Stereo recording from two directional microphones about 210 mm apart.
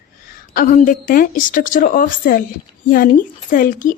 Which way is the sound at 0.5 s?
40° left (ahead or behind).